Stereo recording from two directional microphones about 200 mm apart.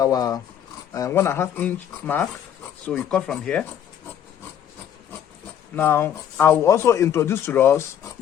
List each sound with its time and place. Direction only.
0.0 s speech: 20° left (ahead or behind)
5.7 s speech: 10° left (ahead or behind)